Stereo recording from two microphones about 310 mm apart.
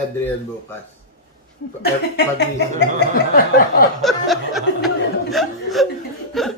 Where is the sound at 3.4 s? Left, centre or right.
Left.